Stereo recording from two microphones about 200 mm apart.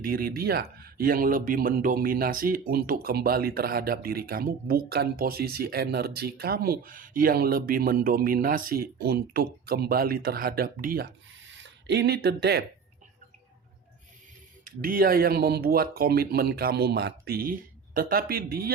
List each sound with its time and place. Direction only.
0.0 s speech: 45° right (ahead or behind)
14.6 s speech: 45° right (ahead or behind)